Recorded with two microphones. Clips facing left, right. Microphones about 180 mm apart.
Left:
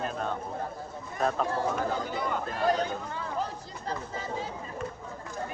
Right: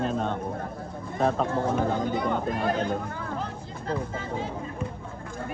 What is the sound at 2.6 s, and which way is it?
Speech, 55° right (ahead or behind).